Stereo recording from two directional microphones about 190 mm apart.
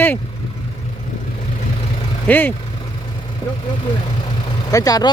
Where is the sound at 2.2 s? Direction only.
10° left (ahead or behind).